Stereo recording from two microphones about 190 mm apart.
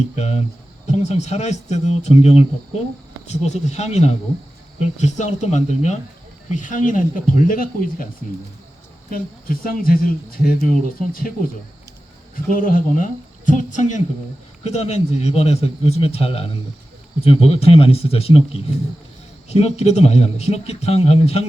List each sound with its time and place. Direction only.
0.2 s a man's voice: 35° left (ahead or behind)
9.0 s speech: 45° left (ahead or behind)
12.5 s a man's voice: 45° left (ahead or behind)